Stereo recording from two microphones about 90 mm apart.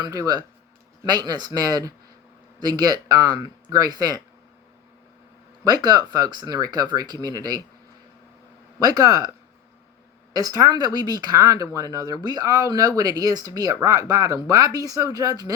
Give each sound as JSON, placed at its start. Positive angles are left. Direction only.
{"t": 0.0, "sound": "speech", "side_deg": -45}
{"t": 5.6, "sound": "speech", "side_deg": -45}
{"t": 8.8, "sound": "speech", "side_deg": -45}
{"t": 10.3, "sound": "speech", "side_deg": -45}